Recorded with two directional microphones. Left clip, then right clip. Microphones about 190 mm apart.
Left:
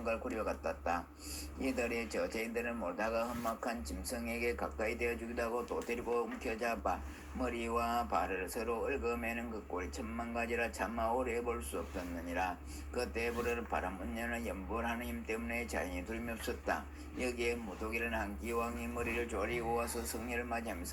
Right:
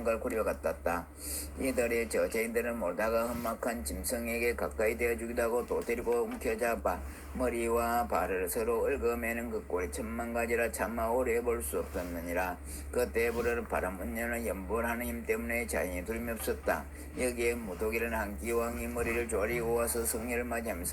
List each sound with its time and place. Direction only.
0.0 s a man's voice: 40° right (ahead or behind)
1.6 s a man's voice: 35° right (ahead or behind)
13.0 s a man's voice: 40° right (ahead or behind)